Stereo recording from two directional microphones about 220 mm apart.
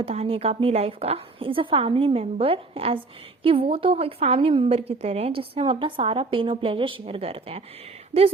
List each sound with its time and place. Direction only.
0.0 s a woman's voice: 25° right (ahead or behind)